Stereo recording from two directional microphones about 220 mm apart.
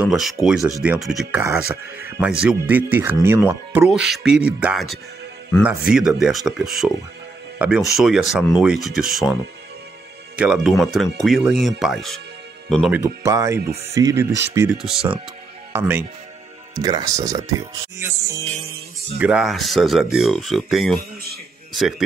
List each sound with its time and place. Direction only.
0.0 s speech: centre (ahead or behind)
0.6 s speech: 15° right (ahead or behind)
10.3 s speech: 5° right (ahead or behind)
13.0 s speech: 15° right (ahead or behind)